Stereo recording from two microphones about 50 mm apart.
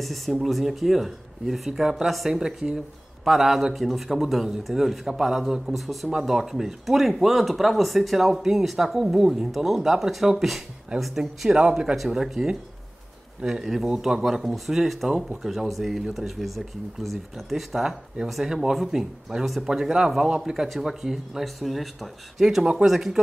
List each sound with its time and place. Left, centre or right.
0.0 s speech: centre
14.2 s speech: centre